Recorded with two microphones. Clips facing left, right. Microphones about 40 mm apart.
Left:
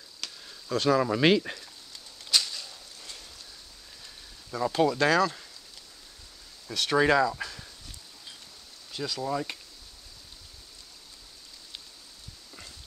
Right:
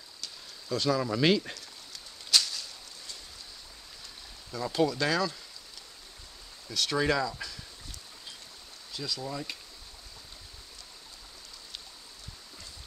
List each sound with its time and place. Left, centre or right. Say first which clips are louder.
0.7 s speech: left 4 dB; left
2.3 s a sound: even; centre
4.5 s speech: left 6 dB; left
4.7 s speech: left 4 dB; left
6.7 s speech: left 5 dB; left
8.9 s speech: left 5 dB; left